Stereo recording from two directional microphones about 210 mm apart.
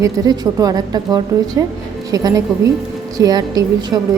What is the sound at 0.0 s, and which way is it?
A woman's voice, 20° right (ahead or behind).